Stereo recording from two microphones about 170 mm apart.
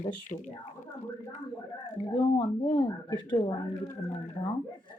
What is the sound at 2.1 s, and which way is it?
Speech, 25° left (ahead or behind).